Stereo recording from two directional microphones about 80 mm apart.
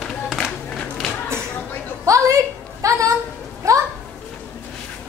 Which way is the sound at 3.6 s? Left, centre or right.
Right.